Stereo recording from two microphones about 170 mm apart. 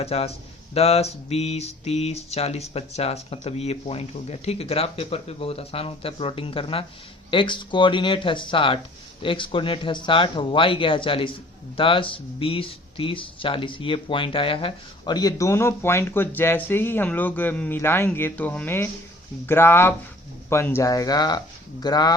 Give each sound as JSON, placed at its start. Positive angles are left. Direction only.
{"t": 0.0, "sound": "speech", "side_deg": 35}